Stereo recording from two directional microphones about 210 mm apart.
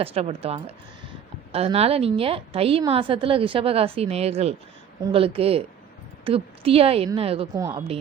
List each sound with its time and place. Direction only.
0.0 s a woman's voice: 30° right (ahead or behind)
7.5 s a woman's voice: 15° right (ahead or behind)